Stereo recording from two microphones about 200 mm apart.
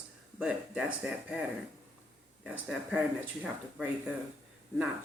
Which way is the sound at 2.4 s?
5° right (ahead or behind).